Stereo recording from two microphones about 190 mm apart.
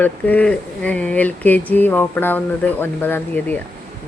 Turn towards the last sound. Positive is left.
turn(degrees=10)  # may be behind; listen again after turning